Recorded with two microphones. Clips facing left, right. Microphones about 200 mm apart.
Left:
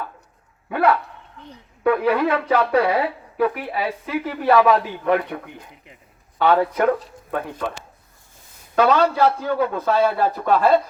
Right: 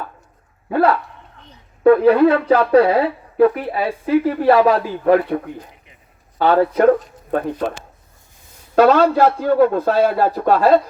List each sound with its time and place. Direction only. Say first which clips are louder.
0.7 s dog: right 3 dB; 30° right (ahead or behind)
1.8 s speech: right 8 dB; 30° right (ahead or behind)
6.4 s speech: right 4 dB; 35° right (ahead or behind)
8.7 s a man's voice: right 5 dB; 45° right (ahead or behind)